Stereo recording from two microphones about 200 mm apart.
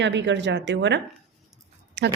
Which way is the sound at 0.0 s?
65° right (ahead or behind).